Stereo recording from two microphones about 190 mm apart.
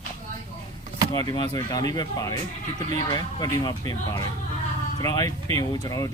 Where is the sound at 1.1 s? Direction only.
20° left (ahead or behind).